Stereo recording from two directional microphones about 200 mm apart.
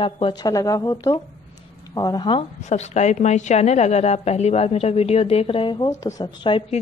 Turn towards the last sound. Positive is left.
turn(degrees=25)  # may be behind; listen again after turning